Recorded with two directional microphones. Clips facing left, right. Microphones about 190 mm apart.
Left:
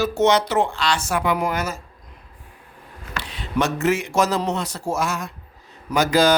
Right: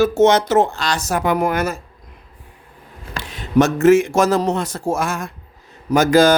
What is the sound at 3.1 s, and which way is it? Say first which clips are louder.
A man's voice: right 9 dB; 45° right (ahead or behind).